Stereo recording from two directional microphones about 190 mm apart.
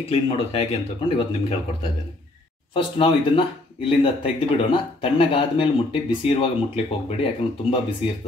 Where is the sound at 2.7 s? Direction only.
30° left (ahead or behind).